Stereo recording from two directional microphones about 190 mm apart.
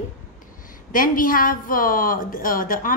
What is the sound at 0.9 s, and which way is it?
A woman's voice, 45° left (ahead or behind).